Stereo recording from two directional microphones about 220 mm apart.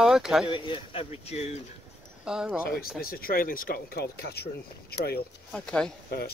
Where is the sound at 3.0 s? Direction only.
40° left (ahead or behind).